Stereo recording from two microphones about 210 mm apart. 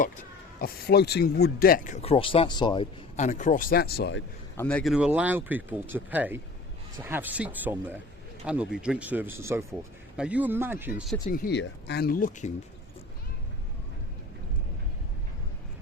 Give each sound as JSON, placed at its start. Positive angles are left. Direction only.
{"t": 0.6, "sound": "speech", "side_deg": 50}
{"t": 3.2, "sound": "speech", "side_deg": 35}
{"t": 4.5, "sound": "speech", "side_deg": 5}
{"t": 11.3, "sound": "speech", "side_deg": 45}